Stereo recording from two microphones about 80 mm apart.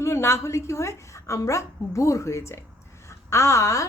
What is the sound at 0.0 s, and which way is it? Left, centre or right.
A woman's voice, left.